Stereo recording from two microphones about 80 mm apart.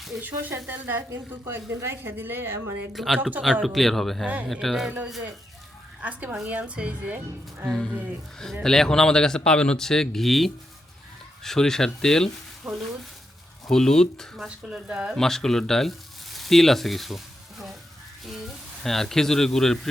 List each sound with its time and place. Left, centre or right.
0.2 s a woman's voice: right
2.9 s speech: centre
3.2 s a woman's voice: right
3.4 s speech: centre
6.0 s speech: centre
7.7 s speech: centre
12.7 s speech: centre
13.7 s speech: centre
14.4 s speech: centre
15.1 s speech: centre
18.8 s speech: centre